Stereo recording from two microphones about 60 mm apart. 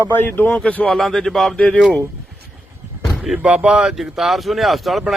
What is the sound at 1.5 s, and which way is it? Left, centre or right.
Speech, centre.